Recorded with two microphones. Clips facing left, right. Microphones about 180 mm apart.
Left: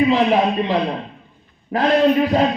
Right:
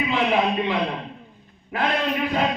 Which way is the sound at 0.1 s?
40° left (ahead or behind).